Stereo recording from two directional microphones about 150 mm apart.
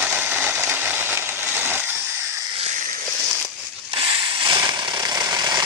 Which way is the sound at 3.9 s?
35° right (ahead or behind).